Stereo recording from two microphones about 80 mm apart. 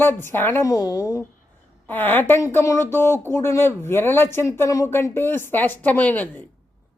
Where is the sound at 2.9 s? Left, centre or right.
Left.